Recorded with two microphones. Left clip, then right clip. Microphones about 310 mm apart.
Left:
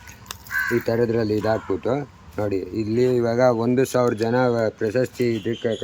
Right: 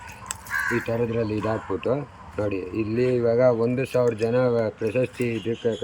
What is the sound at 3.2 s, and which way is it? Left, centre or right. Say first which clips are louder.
Speech: left 1 dB; centre.